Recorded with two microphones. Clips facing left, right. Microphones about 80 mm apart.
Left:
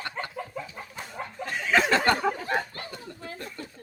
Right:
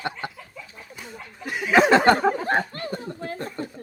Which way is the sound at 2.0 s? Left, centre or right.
Right.